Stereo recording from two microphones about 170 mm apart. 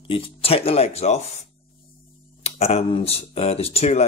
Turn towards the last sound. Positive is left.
turn(degrees=40)  # may be behind; listen again after turning